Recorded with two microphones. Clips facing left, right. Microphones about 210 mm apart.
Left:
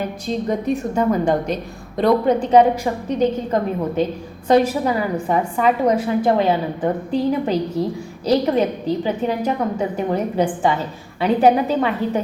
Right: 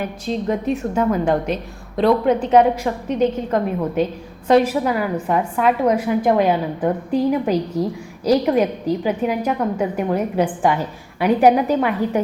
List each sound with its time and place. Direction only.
0.3 s a woman's voice: 5° right (ahead or behind)